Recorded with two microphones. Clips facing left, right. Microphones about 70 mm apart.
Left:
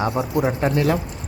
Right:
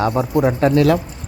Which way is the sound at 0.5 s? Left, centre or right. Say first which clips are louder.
Right 8 dB; right.